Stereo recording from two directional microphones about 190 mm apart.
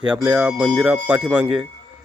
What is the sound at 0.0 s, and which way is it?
Speech, 5° right (ahead or behind).